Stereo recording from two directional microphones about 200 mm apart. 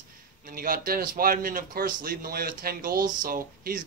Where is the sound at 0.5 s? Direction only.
45° right (ahead or behind).